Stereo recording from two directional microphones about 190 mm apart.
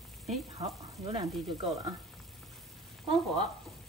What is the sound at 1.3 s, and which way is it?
Frying, centre (ahead or behind).